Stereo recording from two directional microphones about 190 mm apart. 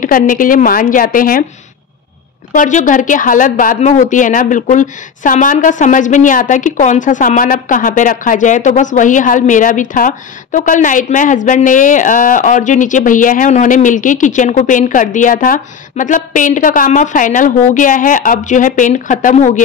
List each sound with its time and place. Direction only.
0.0 s a woman's voice: 45° left (ahead or behind)
2.5 s a woman's voice: 45° left (ahead or behind)